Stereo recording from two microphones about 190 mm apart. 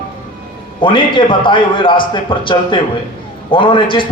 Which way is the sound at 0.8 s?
25° left (ahead or behind).